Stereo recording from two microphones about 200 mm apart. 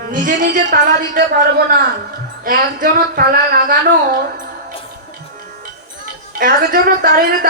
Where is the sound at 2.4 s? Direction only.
45° right (ahead or behind).